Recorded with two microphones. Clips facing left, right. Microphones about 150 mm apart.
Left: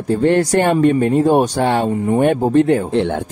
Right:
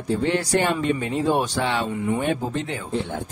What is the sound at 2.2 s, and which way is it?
Speech, 55° left (ahead or behind).